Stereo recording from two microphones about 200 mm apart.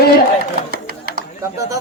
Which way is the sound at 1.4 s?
15° right (ahead or behind).